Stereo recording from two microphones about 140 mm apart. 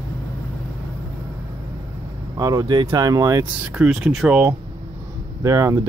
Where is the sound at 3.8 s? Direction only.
5° right (ahead or behind).